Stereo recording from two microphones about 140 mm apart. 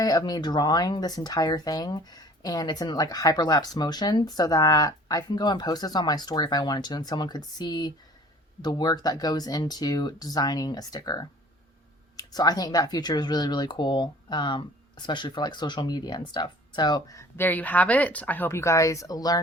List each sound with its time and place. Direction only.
0.0 s speech: 25° left (ahead or behind)